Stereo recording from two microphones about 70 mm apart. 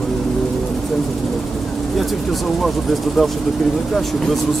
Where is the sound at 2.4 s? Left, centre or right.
Centre.